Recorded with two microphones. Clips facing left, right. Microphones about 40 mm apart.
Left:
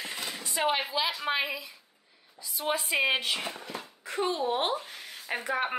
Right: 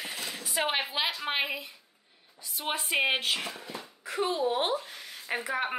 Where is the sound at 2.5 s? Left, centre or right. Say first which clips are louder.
Left 1 dB; right.